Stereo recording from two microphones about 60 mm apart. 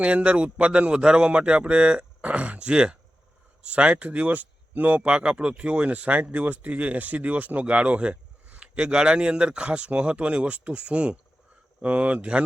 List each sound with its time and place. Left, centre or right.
0.0 s speech: right